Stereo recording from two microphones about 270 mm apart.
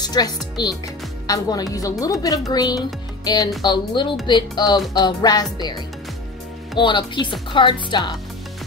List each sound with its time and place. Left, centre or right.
0.0 s speech: centre